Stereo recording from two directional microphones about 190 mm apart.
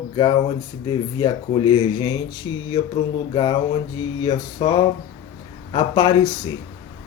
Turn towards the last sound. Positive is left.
turn(degrees=20)  # may be behind; listen again after turning